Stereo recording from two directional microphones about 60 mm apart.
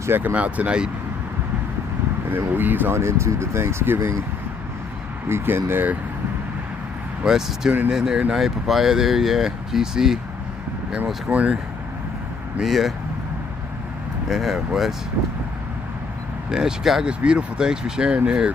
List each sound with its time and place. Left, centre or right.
0.1 s speech: right
0.3 s speech: right
2.3 s speech: right
2.9 s speech: right
5.3 s speech: right
7.3 s speech: centre
11.0 s speech: right
12.6 s speech: centre
14.3 s speech: centre
16.5 s speech: centre